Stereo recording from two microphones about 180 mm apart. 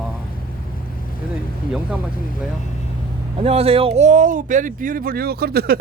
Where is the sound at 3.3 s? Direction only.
35° right (ahead or behind).